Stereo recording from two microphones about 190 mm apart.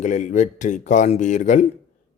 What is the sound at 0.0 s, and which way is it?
A man's voice, 40° left (ahead or behind).